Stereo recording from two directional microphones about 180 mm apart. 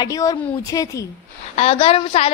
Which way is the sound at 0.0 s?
20° left (ahead or behind).